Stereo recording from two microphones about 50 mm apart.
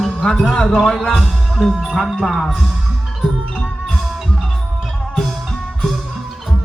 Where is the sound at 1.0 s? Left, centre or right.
Centre.